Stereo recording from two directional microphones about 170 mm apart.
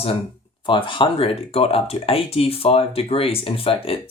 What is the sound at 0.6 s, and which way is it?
Speech, 30° left (ahead or behind).